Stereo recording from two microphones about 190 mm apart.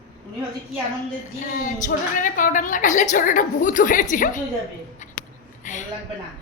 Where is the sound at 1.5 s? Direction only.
45° left (ahead or behind).